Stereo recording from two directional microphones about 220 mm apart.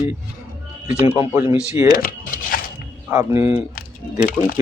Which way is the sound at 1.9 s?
40° left (ahead or behind).